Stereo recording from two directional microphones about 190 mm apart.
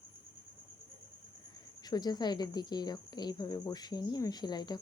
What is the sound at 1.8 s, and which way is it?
Speech, 20° left (ahead or behind).